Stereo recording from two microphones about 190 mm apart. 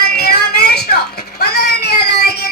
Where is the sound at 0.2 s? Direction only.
55° left (ahead or behind).